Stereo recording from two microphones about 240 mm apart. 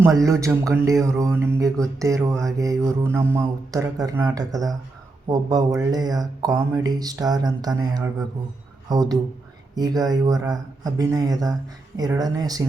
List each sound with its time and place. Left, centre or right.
0.3 s speech: centre